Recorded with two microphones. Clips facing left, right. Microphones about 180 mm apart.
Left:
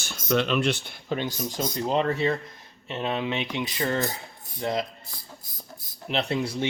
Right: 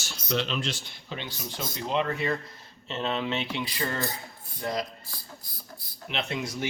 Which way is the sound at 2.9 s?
15° left (ahead or behind).